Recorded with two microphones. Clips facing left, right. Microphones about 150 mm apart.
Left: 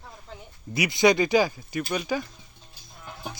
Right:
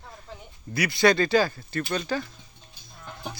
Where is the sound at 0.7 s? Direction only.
20° left (ahead or behind).